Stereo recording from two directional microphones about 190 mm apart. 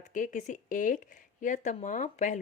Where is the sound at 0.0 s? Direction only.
45° left (ahead or behind).